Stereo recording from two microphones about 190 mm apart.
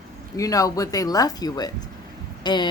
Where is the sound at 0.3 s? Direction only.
20° left (ahead or behind).